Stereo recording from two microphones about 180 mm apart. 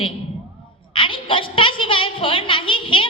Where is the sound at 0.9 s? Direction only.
30° left (ahead or behind).